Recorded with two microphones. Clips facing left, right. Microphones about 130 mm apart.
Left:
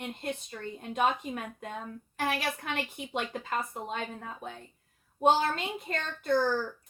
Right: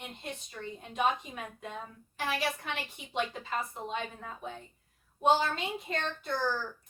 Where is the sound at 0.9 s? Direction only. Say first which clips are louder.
Left 2 dB; 55° left (ahead or behind).